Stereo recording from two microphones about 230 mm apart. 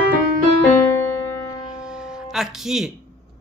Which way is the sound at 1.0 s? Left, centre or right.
Centre.